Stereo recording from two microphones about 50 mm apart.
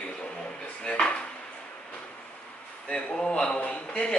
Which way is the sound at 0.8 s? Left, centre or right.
Centre.